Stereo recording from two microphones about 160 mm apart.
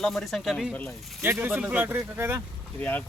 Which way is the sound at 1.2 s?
15° right (ahead or behind).